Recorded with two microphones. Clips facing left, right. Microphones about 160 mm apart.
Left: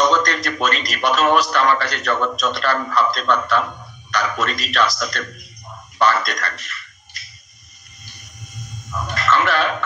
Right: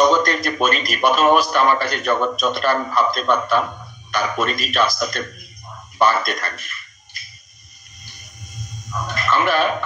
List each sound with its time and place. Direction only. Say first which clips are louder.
0.0 s a man's voice: right 2 dB; 15° right (ahead or behind)
9.1 s speech: even; 15° right (ahead or behind)